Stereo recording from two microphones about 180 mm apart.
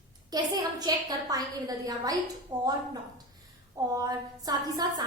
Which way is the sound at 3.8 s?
20° right (ahead or behind).